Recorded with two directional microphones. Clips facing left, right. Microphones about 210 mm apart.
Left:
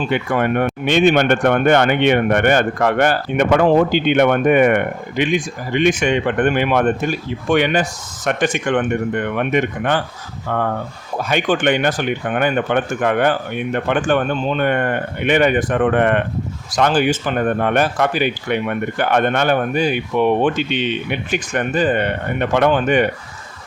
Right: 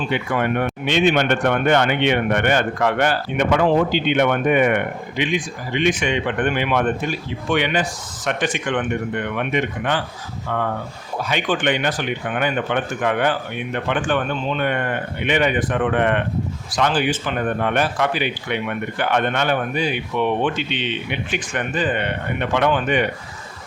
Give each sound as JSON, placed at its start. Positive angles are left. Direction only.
{"t": 0.1, "sound": "speech", "side_deg": 50}
{"t": 11.2, "sound": "speech", "side_deg": 45}